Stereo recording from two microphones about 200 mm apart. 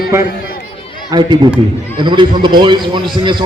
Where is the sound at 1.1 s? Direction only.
20° right (ahead or behind).